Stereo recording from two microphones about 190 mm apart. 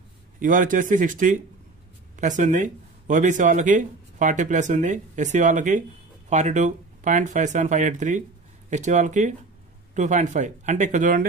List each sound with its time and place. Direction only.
0.4 s speech: 45° right (ahead or behind)